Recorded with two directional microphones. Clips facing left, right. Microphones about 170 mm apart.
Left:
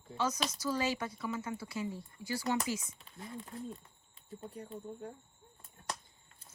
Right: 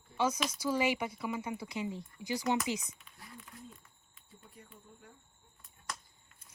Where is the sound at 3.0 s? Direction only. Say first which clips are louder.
Left 8 dB; 25° left (ahead or behind).